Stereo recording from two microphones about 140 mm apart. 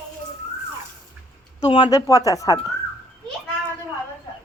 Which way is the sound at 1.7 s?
35° left (ahead or behind).